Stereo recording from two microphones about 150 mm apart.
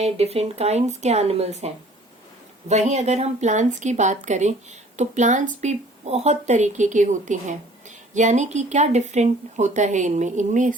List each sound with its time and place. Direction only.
0.0 s speech: 45° right (ahead or behind)